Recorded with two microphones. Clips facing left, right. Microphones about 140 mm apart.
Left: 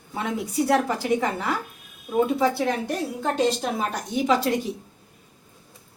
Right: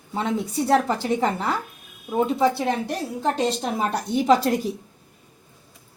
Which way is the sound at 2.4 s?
25° right (ahead or behind).